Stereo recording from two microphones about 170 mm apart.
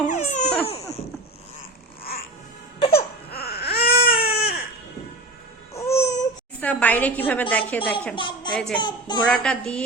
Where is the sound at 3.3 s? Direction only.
65° left (ahead or behind).